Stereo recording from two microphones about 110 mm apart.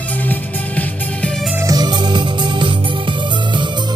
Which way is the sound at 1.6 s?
35° right (ahead or behind).